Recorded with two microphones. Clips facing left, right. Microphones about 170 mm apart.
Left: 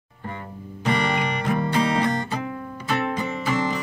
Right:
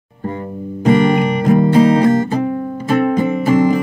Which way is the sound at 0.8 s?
45° right (ahead or behind).